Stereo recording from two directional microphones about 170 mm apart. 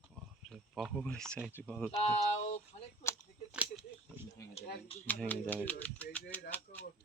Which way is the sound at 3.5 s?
5° right (ahead or behind).